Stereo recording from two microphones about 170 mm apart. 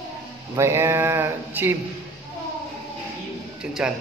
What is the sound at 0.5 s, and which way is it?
Speech, 15° right (ahead or behind).